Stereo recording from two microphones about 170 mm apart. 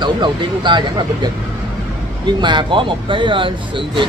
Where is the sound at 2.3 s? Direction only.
25° right (ahead or behind).